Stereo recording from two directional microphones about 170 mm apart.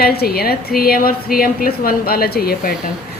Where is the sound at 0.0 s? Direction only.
65° left (ahead or behind).